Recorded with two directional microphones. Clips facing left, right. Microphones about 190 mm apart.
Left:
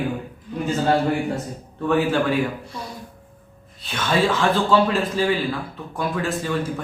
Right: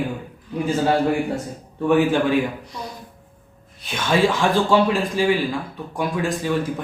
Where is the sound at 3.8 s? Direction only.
15° right (ahead or behind).